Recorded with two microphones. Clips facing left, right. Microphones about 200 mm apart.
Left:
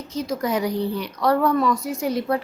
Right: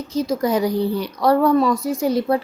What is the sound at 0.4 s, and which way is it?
A woman's voice, 35° right (ahead or behind).